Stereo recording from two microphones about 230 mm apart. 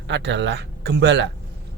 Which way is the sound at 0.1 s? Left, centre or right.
Right.